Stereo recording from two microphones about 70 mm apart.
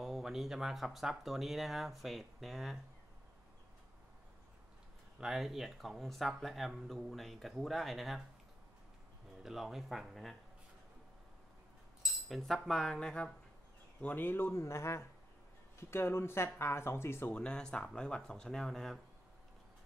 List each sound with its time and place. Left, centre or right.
0.0 s speech: centre
5.2 s speech: centre
9.4 s speech: centre
12.0 s cutlery: centre
14.0 s speech: left
17.3 s speech: centre